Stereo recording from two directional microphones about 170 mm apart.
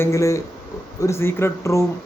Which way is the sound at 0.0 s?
15° left (ahead or behind).